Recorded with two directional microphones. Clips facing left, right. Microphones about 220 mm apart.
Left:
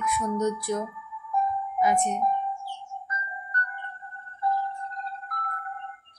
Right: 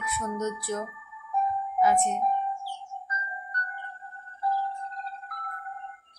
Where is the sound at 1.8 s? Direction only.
15° left (ahead or behind).